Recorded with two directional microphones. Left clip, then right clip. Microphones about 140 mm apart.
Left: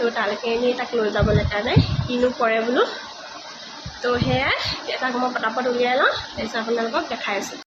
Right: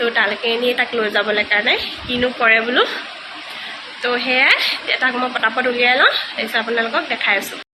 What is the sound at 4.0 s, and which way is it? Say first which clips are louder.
A woman's voice: right 6 dB; 10° left (ahead or behind).